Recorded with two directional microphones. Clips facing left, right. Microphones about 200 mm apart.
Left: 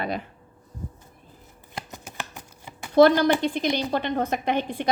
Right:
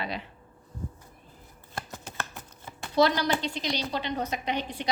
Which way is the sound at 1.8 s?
15° left (ahead or behind).